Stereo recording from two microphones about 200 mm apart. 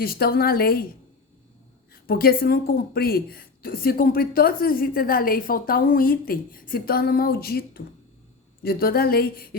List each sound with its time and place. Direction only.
0.0 s a woman's voice: 50° left (ahead or behind)
1.9 s a woman's voice: 50° left (ahead or behind)